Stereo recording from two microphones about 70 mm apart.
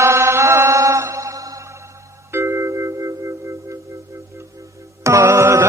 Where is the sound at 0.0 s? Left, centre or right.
Right.